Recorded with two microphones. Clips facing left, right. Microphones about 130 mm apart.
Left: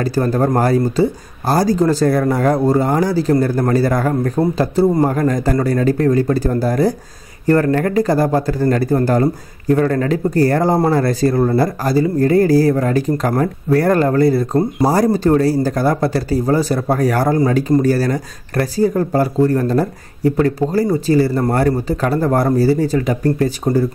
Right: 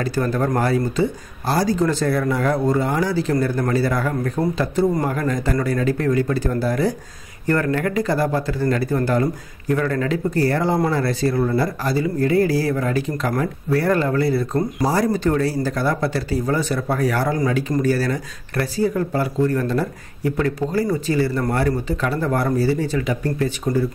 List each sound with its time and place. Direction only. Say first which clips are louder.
0.0 s speech: left 5 dB; 40° left (ahead or behind)
4.4 s speech: left 4 dB; 30° left (ahead or behind)